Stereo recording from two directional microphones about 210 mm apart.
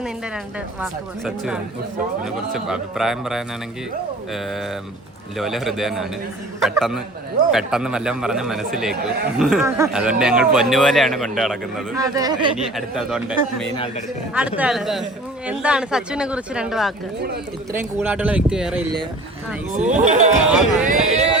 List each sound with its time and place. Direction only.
0.8 s speech: 5° right (ahead or behind)
5.4 s speech: centre (ahead or behind)
9.6 s speech: 15° right (ahead or behind)
11.9 s speech: 15° right (ahead or behind)
12.7 s speech: centre (ahead or behind)
19.7 s speech: 35° right (ahead or behind)
20.5 s speech: centre (ahead or behind)
20.8 s a sound: 30° right (ahead or behind)